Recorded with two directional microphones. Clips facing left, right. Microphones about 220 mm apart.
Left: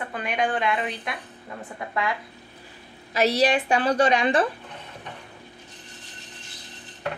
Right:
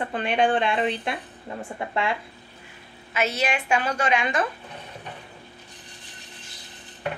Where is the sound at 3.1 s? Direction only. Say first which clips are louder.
Left 5 dB; 35° left (ahead or behind).